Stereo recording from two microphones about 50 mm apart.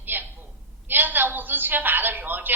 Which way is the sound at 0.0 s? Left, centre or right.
Right.